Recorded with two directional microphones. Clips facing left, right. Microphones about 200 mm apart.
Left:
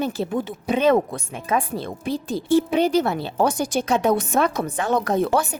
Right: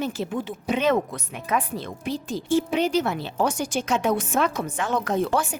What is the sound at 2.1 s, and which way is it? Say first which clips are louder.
Speech: left 4 dB; 60° left (ahead or behind).